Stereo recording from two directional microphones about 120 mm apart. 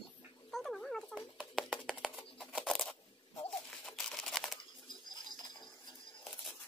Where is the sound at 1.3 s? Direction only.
5° right (ahead or behind).